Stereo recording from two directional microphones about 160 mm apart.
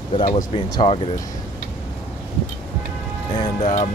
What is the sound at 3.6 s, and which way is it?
Speech, 40° left (ahead or behind).